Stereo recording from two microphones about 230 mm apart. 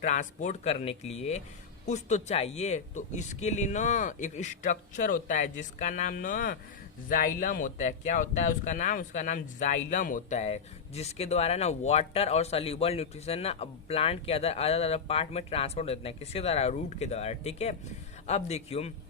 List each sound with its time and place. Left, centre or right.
0.0 s speech: left